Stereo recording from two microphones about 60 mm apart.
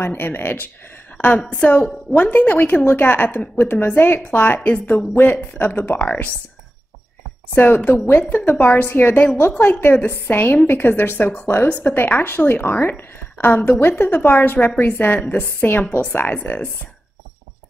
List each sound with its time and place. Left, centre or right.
0.0 s a woman's voice: left
1.1 s a woman's voice: left
7.5 s a woman's voice: left
9.5 s a woman's voice: left
10.0 s a woman's voice: left